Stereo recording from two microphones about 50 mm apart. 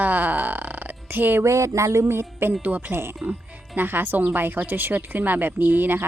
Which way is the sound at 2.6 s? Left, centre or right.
Right.